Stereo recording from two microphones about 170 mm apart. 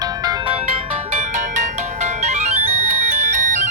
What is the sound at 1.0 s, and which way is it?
Ringtone, 45° right (ahead or behind).